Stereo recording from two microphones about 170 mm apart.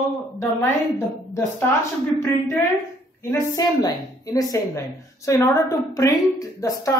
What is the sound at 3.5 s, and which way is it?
A woman's voice, 20° left (ahead or behind).